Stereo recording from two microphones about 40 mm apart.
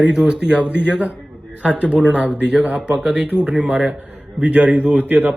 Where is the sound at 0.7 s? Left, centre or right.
Right.